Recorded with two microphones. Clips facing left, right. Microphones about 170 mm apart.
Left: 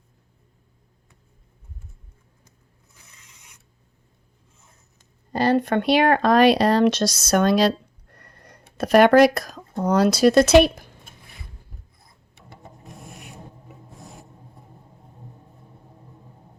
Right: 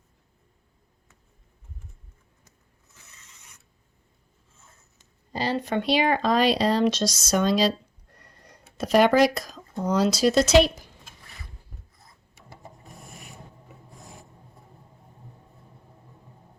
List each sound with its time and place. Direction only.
5.3 s speech: 55° left (ahead or behind)